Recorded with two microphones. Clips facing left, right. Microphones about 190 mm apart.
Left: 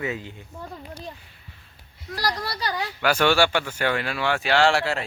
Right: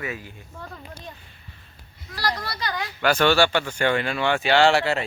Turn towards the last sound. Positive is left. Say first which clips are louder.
# right 2 dB
turn(degrees=0)  # may be behind; listen again after turning